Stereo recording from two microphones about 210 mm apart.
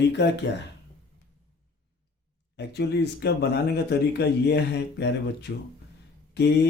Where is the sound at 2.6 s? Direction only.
55° left (ahead or behind).